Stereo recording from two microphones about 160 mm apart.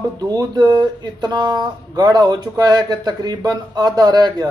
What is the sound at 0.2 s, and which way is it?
Speech, 25° right (ahead or behind).